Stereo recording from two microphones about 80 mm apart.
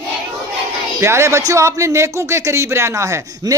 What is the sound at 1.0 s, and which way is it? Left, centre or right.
A man's voice, right.